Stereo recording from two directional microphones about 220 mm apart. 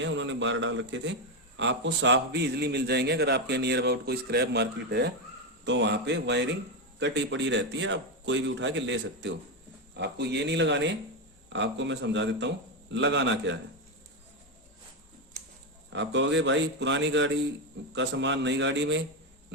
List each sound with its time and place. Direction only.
0.0 s a man's voice: 55° right (ahead or behind)
15.9 s a man's voice: 55° right (ahead or behind)